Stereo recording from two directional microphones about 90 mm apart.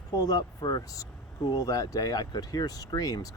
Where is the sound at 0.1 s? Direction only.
45° left (ahead or behind).